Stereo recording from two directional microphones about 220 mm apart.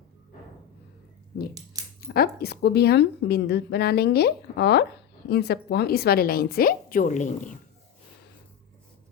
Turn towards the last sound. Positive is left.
turn(degrees=35)  # may be behind; listen again after turning